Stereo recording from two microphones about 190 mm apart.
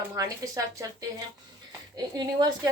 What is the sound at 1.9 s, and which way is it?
Speech, 20° right (ahead or behind).